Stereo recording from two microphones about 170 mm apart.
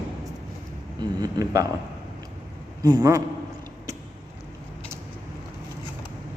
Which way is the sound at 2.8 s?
20° right (ahead or behind).